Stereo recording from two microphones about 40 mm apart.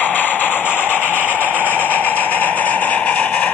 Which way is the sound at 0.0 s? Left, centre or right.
Left.